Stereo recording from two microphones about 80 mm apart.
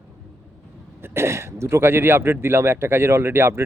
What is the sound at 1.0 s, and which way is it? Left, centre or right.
Speech, right.